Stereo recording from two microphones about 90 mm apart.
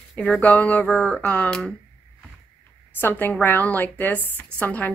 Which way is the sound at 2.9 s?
20° left (ahead or behind).